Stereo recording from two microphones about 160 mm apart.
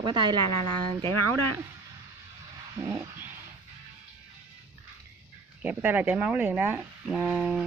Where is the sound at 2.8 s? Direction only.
15° right (ahead or behind).